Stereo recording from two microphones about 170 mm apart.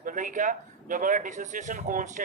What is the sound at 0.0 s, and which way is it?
Speech, 50° right (ahead or behind).